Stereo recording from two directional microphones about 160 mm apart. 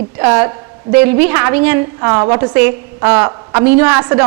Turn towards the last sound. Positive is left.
turn(degrees=-10)  # may be behind; listen again after turning